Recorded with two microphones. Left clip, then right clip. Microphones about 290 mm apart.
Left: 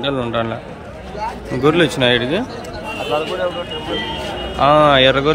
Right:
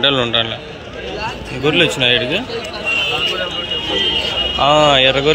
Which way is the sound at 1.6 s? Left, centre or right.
Centre.